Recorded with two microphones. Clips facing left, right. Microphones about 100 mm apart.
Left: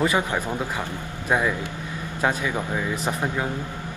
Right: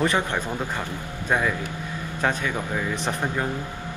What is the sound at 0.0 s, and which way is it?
A man's voice, 10° left (ahead or behind).